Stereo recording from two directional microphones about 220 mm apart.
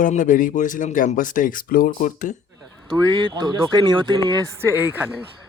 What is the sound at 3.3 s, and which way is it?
Speech, 20° right (ahead or behind).